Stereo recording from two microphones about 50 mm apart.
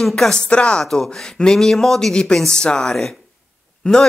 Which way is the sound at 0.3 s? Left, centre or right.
Left.